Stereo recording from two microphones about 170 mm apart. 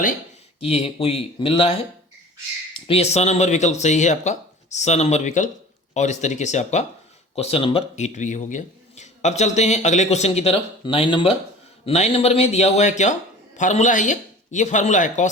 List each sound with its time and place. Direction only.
0.6 s speech: 35° left (ahead or behind)
2.7 s speech: 35° left (ahead or behind)